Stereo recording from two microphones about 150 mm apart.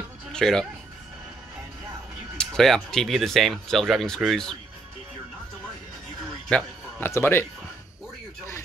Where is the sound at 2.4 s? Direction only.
5° left (ahead or behind).